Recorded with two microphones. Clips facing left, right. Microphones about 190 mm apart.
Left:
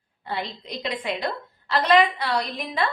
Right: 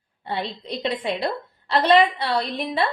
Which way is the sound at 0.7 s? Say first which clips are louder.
Right 4 dB; 30° right (ahead or behind).